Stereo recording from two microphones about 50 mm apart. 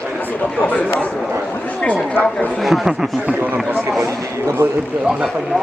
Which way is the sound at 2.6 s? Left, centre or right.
Centre.